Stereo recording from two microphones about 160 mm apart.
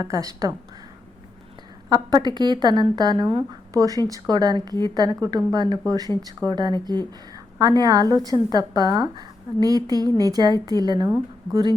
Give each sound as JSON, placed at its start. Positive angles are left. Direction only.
{"t": 0.1, "sound": "speech", "side_deg": -20}
{"t": 1.9, "sound": "speech", "side_deg": -25}